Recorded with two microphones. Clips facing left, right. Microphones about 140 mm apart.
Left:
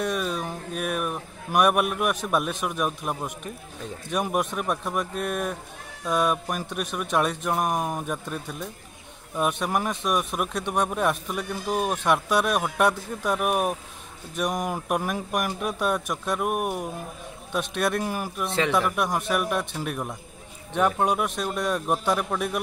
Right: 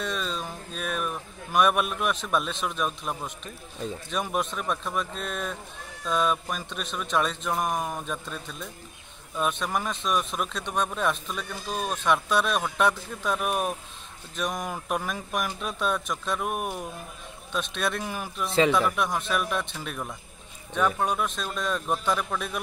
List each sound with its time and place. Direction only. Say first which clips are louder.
0.0 s a sound: left 4 dB; 15° left (ahead or behind)
2.2 s a man's voice: left 2 dB; 15° left (ahead or behind)
19.0 s speech: left 3 dB; 15° left (ahead or behind)